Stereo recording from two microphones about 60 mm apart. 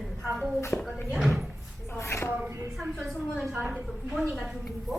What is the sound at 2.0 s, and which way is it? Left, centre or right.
Speech, left.